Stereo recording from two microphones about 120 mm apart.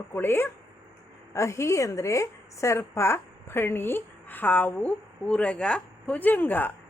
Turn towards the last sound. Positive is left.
turn(degrees=15)  # may be behind; listen again after turning